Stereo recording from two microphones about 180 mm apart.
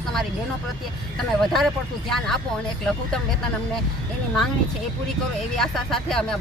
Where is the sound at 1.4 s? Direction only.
Centre (ahead or behind).